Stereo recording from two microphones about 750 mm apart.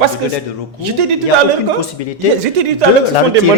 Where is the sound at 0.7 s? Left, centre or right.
Right.